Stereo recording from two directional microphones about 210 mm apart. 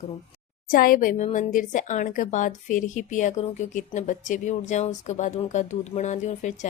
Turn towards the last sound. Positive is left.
turn(degrees=35)  # may be behind; listen again after turning